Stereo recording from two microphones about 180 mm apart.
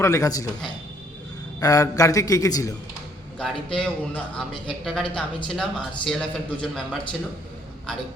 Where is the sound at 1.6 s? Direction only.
20° left (ahead or behind).